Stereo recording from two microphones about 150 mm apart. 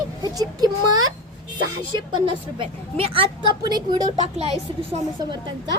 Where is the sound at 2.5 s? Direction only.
35° right (ahead or behind).